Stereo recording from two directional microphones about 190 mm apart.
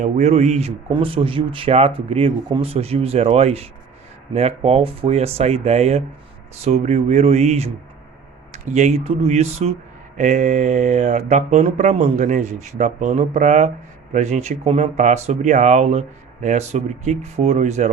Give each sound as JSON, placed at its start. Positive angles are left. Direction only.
{"t": 0.0, "sound": "speech", "side_deg": -35}